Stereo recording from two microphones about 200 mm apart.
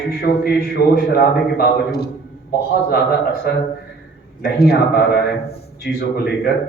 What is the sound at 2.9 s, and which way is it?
Speech, 50° left (ahead or behind).